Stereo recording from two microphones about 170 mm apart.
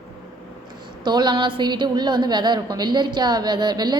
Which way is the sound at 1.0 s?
25° right (ahead or behind).